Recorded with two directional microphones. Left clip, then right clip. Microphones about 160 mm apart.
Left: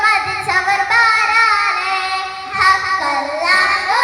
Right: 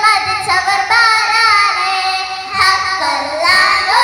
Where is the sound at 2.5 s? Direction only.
25° right (ahead or behind).